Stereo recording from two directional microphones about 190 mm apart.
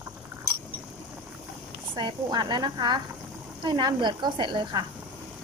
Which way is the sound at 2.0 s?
20° right (ahead or behind).